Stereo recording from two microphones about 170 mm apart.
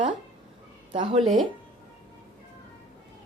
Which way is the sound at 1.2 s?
Centre (ahead or behind).